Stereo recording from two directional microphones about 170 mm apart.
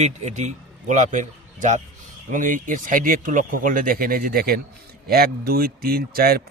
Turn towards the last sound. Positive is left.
turn(degrees=-65)  # may be behind; listen again after turning